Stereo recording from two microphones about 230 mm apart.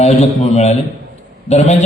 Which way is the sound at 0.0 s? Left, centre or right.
Left.